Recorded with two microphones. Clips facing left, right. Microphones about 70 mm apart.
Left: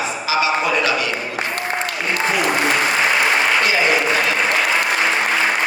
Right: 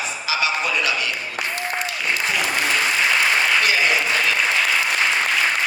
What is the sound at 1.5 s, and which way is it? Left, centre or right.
Applause, left.